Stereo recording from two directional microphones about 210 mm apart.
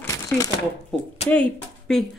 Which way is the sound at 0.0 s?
15° left (ahead or behind).